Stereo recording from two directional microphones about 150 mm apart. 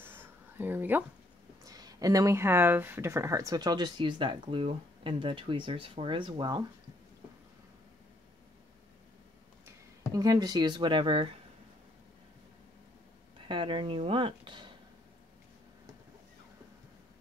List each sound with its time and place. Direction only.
0.0 s a sound: 15° right (ahead or behind)
1.6 s speech: 25° right (ahead or behind)
10.1 s speech: 25° right (ahead or behind)
13.5 s speech: 35° right (ahead or behind)